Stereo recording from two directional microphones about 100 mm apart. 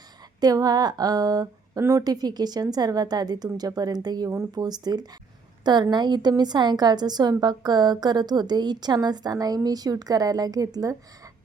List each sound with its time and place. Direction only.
0.3 s a woman's voice: 40° right (ahead or behind)